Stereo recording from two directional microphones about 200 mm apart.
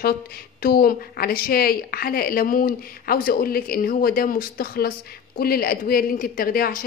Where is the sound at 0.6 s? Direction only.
50° left (ahead or behind).